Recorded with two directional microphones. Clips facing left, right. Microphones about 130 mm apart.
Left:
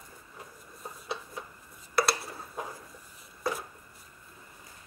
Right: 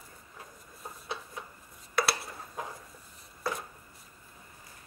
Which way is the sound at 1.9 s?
Centre (ahead or behind).